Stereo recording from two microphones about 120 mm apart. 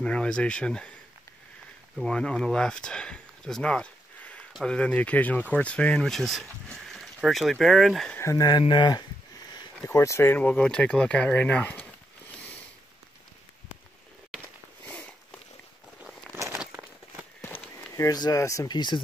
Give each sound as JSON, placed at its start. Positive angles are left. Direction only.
{"t": 0.0, "sound": "speech", "side_deg": 10}
{"t": 2.0, "sound": "speech", "side_deg": 5}
{"t": 8.2, "sound": "speech", "side_deg": 25}
{"t": 9.8, "sound": "speech", "side_deg": 25}
{"t": 14.9, "sound": "a sound", "side_deg": 10}
{"t": 17.4, "sound": "run", "side_deg": 15}
{"t": 18.0, "sound": "speech", "side_deg": 30}